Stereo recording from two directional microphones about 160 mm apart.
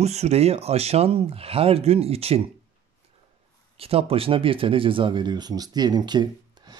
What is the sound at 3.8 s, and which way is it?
Speech, 35° right (ahead or behind).